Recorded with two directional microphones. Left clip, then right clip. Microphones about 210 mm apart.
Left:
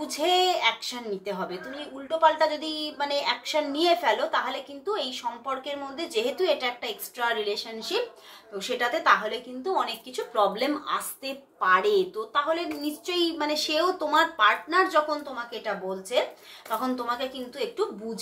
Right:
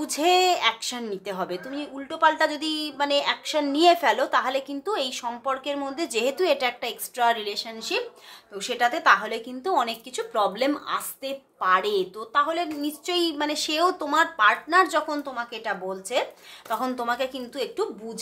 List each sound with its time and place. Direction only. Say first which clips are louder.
0.0 s a woman's voice: right 3 dB; 45° right (ahead or behind)